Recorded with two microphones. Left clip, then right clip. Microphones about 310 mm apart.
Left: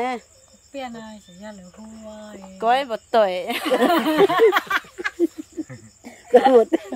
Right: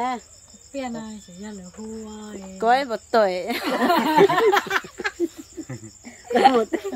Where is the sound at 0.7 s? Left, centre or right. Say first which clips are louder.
Right 1 dB; centre.